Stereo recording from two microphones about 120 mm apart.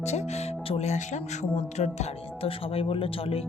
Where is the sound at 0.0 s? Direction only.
70° left (ahead or behind).